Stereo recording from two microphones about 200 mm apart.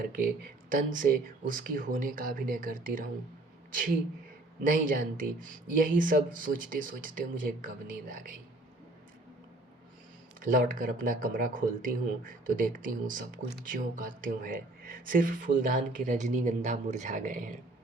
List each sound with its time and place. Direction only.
0.0 s speech: 45° right (ahead or behind)
10.4 s speech: 45° right (ahead or behind)